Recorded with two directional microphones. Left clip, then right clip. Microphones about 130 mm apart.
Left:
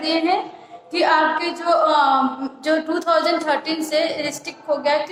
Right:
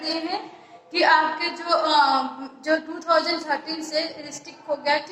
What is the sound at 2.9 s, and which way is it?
A woman's voice, 50° left (ahead or behind).